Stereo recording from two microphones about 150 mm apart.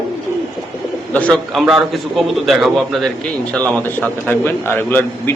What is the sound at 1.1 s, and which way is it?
Speech, 10° left (ahead or behind).